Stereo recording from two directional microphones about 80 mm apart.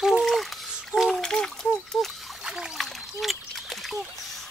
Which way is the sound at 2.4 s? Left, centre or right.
Centre.